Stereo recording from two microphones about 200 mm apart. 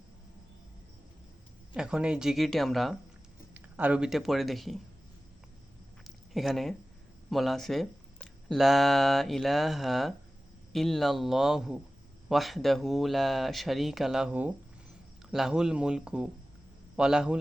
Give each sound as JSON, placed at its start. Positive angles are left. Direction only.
{"t": 1.7, "sound": "speech", "side_deg": -5}
{"t": 6.3, "sound": "speech", "side_deg": 0}